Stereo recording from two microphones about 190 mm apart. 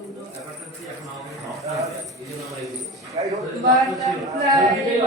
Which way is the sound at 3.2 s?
25° right (ahead or behind).